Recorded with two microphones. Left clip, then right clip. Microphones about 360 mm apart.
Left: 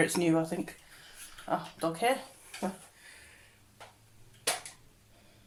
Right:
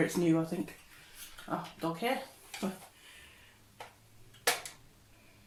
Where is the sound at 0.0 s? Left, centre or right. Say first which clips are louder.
Left 2 dB; left.